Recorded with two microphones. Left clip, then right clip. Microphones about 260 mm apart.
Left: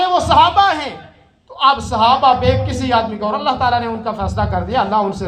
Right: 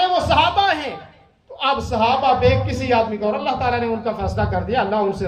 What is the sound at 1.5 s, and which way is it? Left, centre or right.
A man's voice, centre.